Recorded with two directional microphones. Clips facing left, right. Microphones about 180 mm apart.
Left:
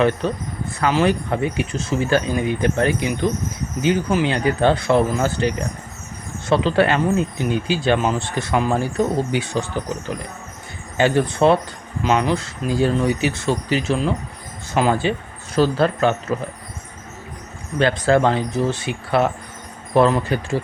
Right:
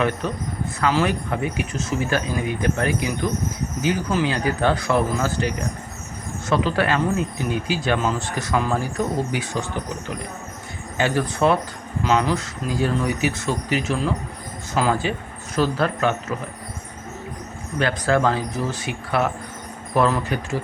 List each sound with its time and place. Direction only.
0.2 s speech: 30° left (ahead or behind)
10.9 s speech: 30° left (ahead or behind)
17.7 s speech: 25° left (ahead or behind)